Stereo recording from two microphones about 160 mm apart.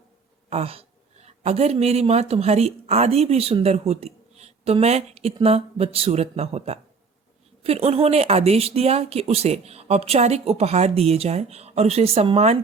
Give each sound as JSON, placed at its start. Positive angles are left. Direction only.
{"t": 0.5, "sound": "speech", "side_deg": -40}